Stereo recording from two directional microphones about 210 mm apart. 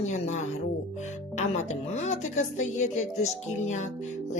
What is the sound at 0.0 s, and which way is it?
A woman's voice, 35° left (ahead or behind).